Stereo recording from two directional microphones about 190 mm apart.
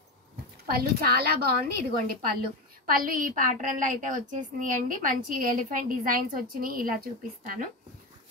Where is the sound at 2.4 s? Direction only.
50° right (ahead or behind).